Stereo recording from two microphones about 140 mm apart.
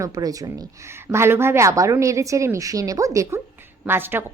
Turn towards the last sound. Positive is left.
turn(degrees=-15)  # may be behind; listen again after turning